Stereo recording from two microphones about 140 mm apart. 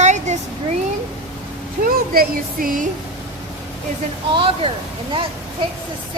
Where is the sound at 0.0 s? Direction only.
55° right (ahead or behind).